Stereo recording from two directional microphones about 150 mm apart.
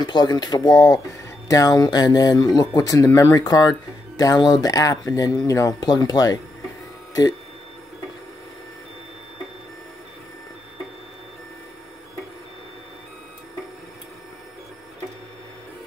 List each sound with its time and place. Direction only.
0.0 s speech: 30° left (ahead or behind)